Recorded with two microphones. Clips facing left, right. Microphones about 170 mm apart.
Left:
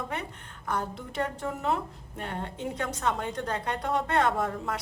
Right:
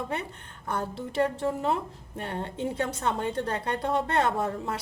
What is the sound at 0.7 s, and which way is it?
A woman's voice, 30° right (ahead or behind).